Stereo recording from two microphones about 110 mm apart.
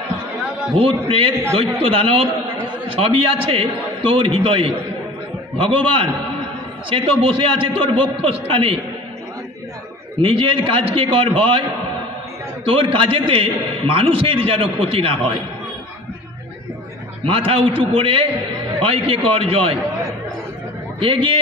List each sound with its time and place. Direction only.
0.7 s a man's voice: 55° right (ahead or behind)
10.2 s a man's voice: 55° right (ahead or behind)
12.6 s a man's voice: 55° right (ahead or behind)
17.2 s a man's voice: 55° right (ahead or behind)
21.0 s a man's voice: 50° right (ahead or behind)